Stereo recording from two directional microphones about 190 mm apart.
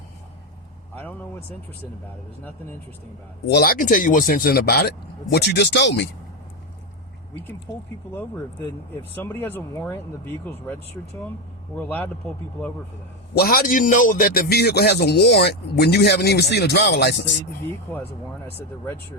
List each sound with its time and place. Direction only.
3.4 s a man's voice: 55° left (ahead or behind)
9.1 s speech: 10° left (ahead or behind)
11.8 s speech: 10° left (ahead or behind)
13.3 s a man's voice: 50° left (ahead or behind)